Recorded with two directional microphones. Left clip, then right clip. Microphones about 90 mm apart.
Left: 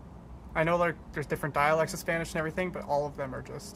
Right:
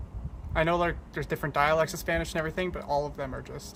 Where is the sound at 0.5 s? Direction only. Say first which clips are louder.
Right 1 dB; 20° right (ahead or behind).